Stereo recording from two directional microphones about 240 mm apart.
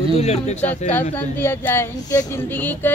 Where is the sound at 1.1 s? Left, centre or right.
Centre.